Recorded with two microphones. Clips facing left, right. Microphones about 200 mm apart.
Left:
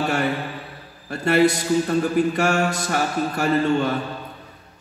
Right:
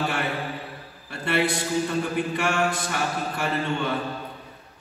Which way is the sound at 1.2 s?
40° left (ahead or behind).